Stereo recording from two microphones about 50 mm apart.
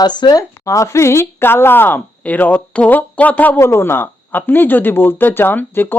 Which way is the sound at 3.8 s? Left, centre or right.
Left.